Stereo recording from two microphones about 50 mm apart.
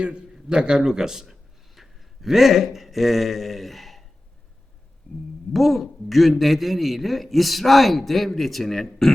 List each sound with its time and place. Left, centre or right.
0.0 s a man's voice: right; by 4.0 s centre
5.1 s speech: left
5.5 s a man's voice: centre